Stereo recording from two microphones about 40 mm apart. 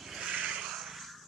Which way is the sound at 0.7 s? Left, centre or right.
Centre.